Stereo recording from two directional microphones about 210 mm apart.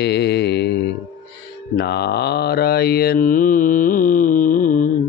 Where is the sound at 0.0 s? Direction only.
50° left (ahead or behind).